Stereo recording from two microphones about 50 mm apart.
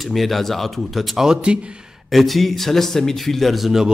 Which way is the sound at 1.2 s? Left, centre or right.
Centre.